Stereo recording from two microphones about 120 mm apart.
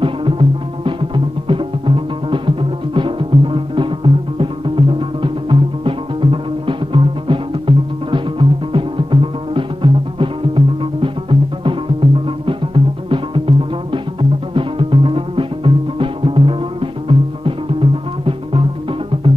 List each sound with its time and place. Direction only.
0.0 s music: 45° right (ahead or behind)